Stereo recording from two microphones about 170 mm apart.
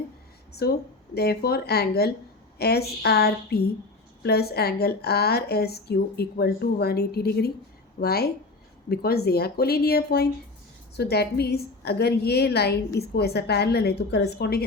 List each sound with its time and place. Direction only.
0.6 s a woman's voice: 70° left (ahead or behind)